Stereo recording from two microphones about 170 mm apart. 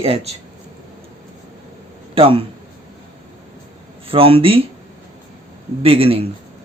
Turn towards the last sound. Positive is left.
turn(degrees=-35)  # may be behind; listen again after turning